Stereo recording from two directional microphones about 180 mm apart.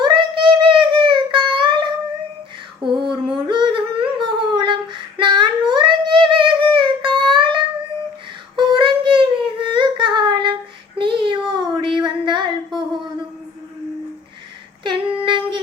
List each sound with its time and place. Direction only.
0.0 s child singing: 25° right (ahead or behind)
2.8 s a sound: 25° right (ahead or behind)
3.3 s humming: 25° right (ahead or behind)
8.5 s a sound: 25° right (ahead or behind)
10.9 s child singing: 25° right (ahead or behind)
14.8 s female singing: 25° right (ahead or behind)